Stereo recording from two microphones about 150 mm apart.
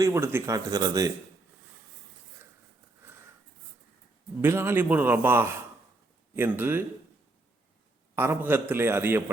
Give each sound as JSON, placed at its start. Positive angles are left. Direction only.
{"t": 0.0, "sound": "speech", "side_deg": -20}
{"t": 4.4, "sound": "a man's voice", "side_deg": -15}
{"t": 8.1, "sound": "a man's voice", "side_deg": -15}